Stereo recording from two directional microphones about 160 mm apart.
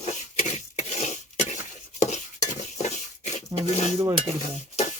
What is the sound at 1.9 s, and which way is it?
Stir, 45° left (ahead or behind).